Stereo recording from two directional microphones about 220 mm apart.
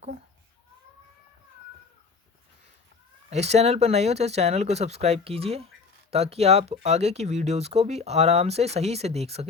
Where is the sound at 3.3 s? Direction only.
30° right (ahead or behind).